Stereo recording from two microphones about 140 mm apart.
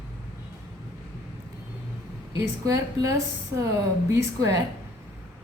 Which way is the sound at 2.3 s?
20° right (ahead or behind).